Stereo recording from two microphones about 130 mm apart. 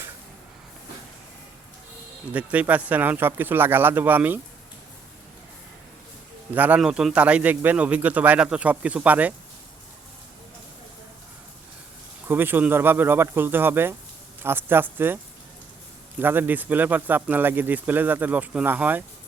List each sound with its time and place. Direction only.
2.3 s speech: 10° right (ahead or behind)
6.5 s speech: 10° right (ahead or behind)
12.3 s speech: 15° right (ahead or behind)